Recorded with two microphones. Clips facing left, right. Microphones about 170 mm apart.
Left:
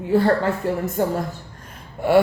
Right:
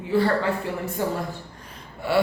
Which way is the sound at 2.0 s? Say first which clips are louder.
Left 7 dB; 50° left (ahead or behind).